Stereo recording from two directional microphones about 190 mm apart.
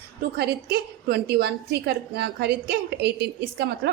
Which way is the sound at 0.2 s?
55° right (ahead or behind).